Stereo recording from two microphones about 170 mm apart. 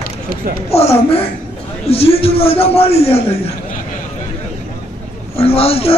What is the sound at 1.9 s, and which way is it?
A man's voice, 35° left (ahead or behind).